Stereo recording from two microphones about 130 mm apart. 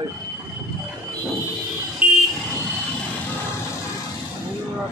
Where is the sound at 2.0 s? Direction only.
10° right (ahead or behind).